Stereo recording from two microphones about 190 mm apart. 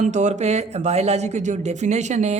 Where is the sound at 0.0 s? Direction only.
40° right (ahead or behind).